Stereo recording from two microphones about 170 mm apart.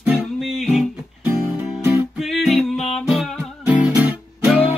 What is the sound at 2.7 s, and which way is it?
Music, 35° left (ahead or behind).